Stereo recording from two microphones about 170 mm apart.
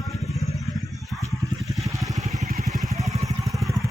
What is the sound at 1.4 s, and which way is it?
Vehicle, 20° right (ahead or behind).